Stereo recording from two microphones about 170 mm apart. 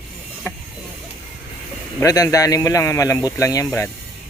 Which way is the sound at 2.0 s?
20° left (ahead or behind).